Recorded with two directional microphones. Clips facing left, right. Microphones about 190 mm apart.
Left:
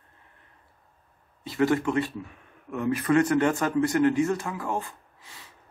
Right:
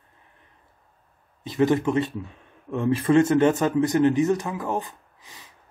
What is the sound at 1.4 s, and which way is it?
A man's voice, 20° right (ahead or behind).